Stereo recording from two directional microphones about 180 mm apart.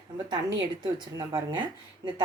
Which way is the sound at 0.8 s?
20° right (ahead or behind).